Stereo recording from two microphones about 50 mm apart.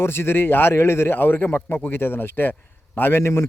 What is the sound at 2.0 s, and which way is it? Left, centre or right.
Speech, left.